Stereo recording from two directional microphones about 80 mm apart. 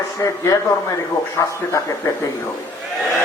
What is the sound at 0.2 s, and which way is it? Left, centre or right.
A man's voice, left.